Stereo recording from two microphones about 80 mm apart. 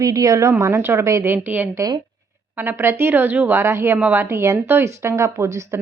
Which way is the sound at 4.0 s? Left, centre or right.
Right.